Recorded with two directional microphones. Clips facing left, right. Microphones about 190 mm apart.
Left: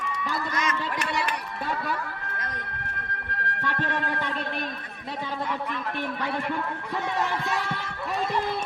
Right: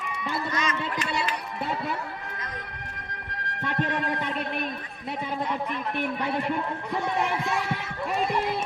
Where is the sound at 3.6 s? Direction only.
20° right (ahead or behind).